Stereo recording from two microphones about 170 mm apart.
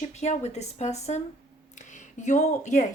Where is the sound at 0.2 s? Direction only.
40° left (ahead or behind).